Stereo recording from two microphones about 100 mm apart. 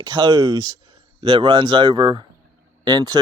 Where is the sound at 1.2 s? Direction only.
55° right (ahead or behind).